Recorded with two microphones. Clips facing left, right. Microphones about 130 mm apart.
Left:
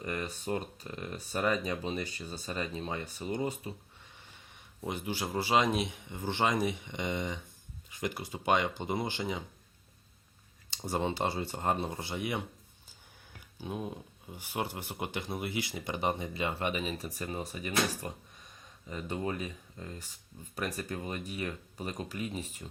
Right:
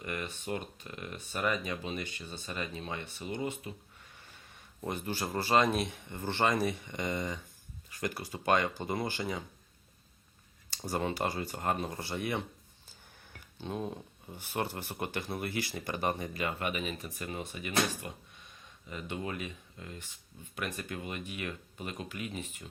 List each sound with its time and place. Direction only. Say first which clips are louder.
0.0 s speech: left 2 dB; 35° left (ahead or behind)
4.8 s speech: even; 10° left (ahead or behind)
10.8 s speech: left 1 dB; 20° left (ahead or behind)